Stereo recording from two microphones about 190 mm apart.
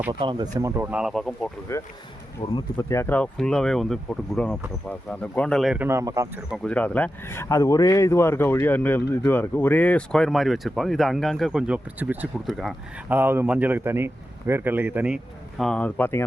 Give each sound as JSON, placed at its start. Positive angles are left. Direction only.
{"t": 0.1, "sound": "speech", "side_deg": -25}
{"t": 1.7, "sound": "speech", "side_deg": 15}
{"t": 6.7, "sound": "speech", "side_deg": 5}